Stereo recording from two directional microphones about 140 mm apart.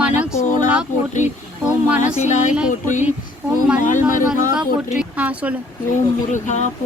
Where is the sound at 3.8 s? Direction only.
70° left (ahead or behind).